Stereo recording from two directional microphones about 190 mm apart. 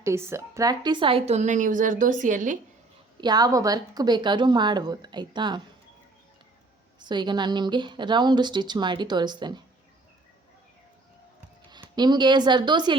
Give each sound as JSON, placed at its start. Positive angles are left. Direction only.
{"t": 0.0, "sound": "a woman's voice", "side_deg": -15}
{"t": 3.2, "sound": "a woman's voice", "side_deg": -20}
{"t": 7.0, "sound": "a woman's voice", "side_deg": -25}
{"t": 11.7, "sound": "speech", "side_deg": -20}